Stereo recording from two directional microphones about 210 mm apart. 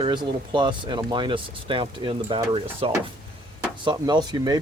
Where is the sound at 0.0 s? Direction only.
20° right (ahead or behind).